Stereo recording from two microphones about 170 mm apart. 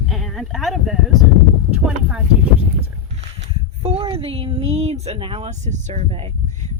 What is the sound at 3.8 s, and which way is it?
Speech, 35° right (ahead or behind).